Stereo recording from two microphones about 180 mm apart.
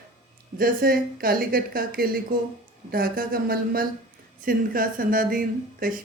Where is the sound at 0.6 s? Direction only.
55° right (ahead or behind).